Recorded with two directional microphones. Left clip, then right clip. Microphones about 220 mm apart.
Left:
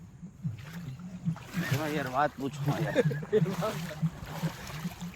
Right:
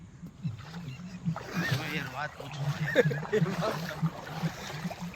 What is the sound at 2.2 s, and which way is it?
Speech, 35° left (ahead or behind).